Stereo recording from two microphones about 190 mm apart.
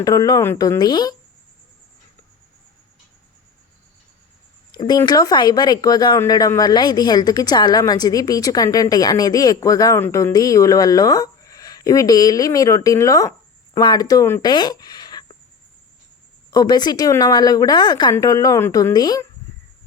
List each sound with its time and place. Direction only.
0.0 s speech: 20° left (ahead or behind)
4.8 s speech: 20° left (ahead or behind)
16.5 s speech: 20° left (ahead or behind)